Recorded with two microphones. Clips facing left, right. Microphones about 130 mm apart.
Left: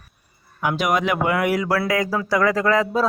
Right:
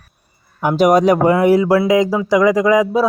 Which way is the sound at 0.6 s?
35° right (ahead or behind).